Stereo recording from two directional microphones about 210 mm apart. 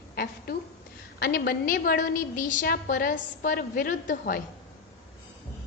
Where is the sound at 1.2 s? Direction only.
45° left (ahead or behind).